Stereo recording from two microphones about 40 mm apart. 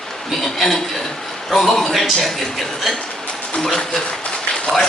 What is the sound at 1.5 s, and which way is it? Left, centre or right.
Speech, centre.